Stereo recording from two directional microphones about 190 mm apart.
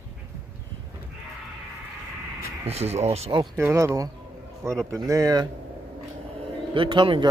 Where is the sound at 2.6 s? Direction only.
35° right (ahead or behind).